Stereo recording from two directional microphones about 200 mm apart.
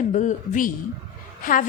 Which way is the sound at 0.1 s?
40° left (ahead or behind).